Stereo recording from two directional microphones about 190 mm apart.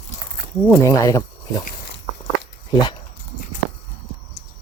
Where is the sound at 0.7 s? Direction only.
15° left (ahead or behind).